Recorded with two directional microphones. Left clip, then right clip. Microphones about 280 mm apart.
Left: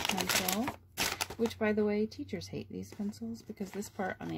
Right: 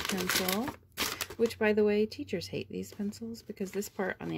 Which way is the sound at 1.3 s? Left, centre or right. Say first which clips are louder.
Right 6 dB; right.